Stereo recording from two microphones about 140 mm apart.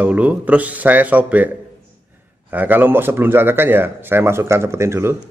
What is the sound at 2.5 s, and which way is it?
A man's voice, 15° right (ahead or behind).